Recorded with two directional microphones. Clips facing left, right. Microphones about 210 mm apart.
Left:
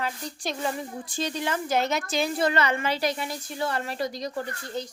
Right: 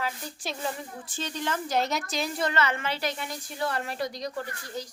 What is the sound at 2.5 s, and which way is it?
Speech, 15° left (ahead or behind).